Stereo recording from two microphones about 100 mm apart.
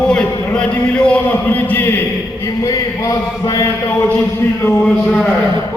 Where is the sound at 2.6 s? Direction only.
40° left (ahead or behind).